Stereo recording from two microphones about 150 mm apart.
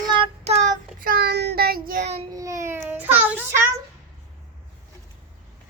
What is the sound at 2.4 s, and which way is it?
Child singing, 20° right (ahead or behind).